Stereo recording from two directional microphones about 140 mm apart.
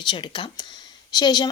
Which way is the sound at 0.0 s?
35° left (ahead or behind).